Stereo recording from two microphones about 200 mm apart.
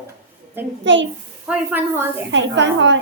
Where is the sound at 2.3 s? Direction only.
65° right (ahead or behind).